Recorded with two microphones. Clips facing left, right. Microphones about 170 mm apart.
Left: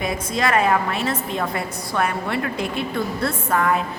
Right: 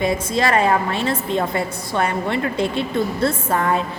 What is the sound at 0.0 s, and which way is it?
A woman's voice, 30° right (ahead or behind).